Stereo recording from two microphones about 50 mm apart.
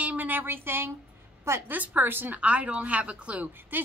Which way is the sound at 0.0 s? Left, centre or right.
Right.